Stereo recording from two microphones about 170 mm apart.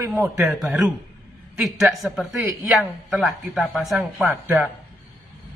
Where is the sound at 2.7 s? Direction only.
Centre (ahead or behind).